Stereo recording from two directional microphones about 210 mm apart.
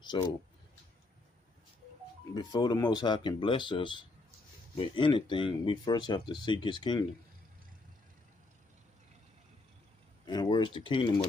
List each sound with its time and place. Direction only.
0.0 s speech: 20° left (ahead or behind)
2.3 s speech: 20° left (ahead or behind)
10.2 s speech: 20° left (ahead or behind)